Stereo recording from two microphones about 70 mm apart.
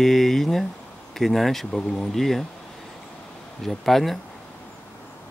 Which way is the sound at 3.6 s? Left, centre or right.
Centre.